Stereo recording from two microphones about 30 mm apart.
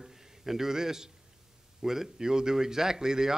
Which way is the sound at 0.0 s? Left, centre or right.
Centre.